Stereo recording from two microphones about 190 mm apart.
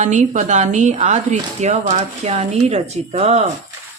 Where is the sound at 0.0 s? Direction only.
40° right (ahead or behind).